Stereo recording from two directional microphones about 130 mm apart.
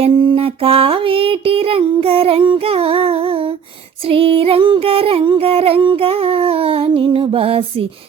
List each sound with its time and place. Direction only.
0.0 s music: 45° right (ahead or behind)